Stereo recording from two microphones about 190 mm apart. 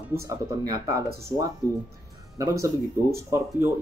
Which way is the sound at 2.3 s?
15° right (ahead or behind).